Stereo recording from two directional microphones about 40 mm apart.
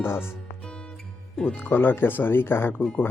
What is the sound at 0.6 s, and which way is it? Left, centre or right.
Music, left.